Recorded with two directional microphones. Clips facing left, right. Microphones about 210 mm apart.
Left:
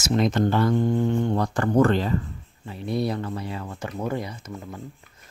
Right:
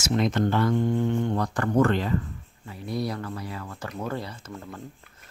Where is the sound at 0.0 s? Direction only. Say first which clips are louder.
Left 2 dB; 35° left (ahead or behind).